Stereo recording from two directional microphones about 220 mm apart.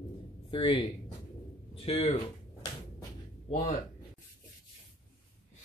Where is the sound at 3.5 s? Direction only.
35° left (ahead or behind).